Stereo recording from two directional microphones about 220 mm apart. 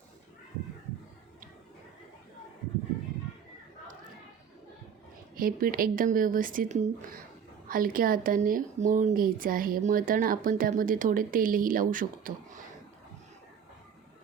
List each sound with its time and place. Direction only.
5.4 s speech: 40° right (ahead or behind)